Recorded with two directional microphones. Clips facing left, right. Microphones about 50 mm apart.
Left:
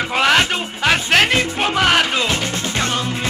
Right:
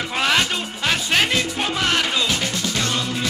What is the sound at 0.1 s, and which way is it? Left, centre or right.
Music, left.